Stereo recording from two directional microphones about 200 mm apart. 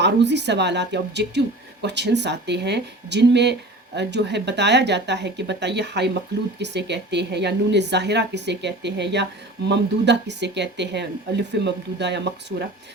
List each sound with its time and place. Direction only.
0.0 s speech: 60° right (ahead or behind)